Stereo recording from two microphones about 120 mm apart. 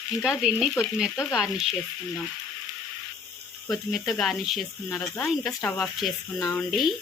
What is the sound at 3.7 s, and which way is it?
Speech, centre (ahead or behind).